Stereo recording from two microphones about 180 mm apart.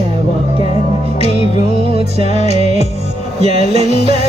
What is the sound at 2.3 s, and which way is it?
Music, 40° left (ahead or behind).